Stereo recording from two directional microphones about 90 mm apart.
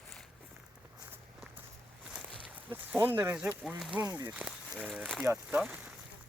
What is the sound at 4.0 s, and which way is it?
Speech, 45° right (ahead or behind).